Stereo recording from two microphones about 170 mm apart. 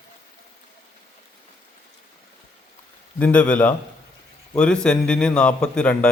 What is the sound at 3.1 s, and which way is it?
A man's voice, 10° left (ahead or behind).